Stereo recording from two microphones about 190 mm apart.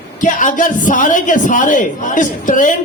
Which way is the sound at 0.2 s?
45° left (ahead or behind).